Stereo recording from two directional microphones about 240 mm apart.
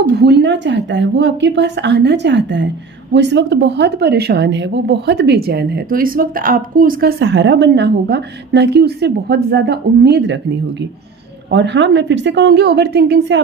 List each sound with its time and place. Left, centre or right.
0.1 s speech: right
11.5 s speech: right